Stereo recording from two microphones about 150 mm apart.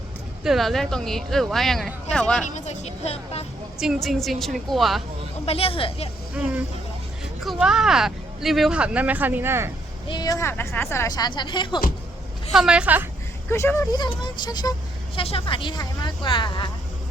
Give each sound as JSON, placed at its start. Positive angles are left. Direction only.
{"t": 0.4, "sound": "speech", "side_deg": 0}
{"t": 2.6, "sound": "speech", "side_deg": 50}
{"t": 3.8, "sound": "speech", "side_deg": 0}
{"t": 5.5, "sound": "speech", "side_deg": 40}
{"t": 6.3, "sound": "a woman's voice", "side_deg": -10}
{"t": 10.1, "sound": "speech", "side_deg": 25}
{"t": 12.5, "sound": "a woman's voice", "side_deg": -5}
{"t": 13.5, "sound": "speech", "side_deg": 15}
{"t": 15.2, "sound": "speech", "side_deg": 40}